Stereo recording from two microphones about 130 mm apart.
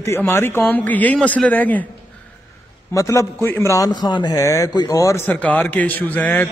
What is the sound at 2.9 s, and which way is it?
A man's voice, 25° left (ahead or behind).